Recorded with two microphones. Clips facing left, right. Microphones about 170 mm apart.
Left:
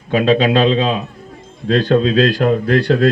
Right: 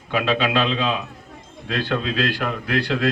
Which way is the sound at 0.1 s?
45° left (ahead or behind).